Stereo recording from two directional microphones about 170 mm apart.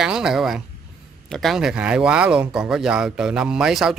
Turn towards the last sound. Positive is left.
turn(degrees=-5)  # may be behind; listen again after turning